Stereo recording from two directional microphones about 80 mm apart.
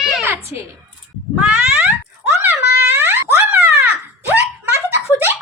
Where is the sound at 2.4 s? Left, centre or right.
Right.